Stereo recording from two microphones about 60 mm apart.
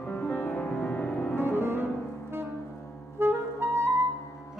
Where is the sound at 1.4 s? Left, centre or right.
Right.